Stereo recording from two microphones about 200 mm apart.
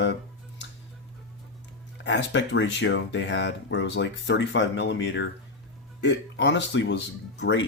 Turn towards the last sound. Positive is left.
turn(degrees=65)  # may be behind; listen again after turning